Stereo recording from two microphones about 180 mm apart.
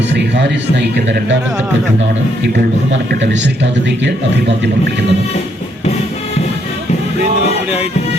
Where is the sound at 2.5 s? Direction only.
80° right.